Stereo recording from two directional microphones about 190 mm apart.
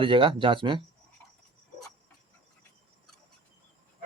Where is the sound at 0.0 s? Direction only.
25° right (ahead or behind).